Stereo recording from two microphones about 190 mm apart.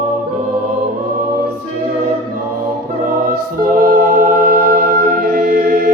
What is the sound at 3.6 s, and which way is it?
Music, 50° right (ahead or behind).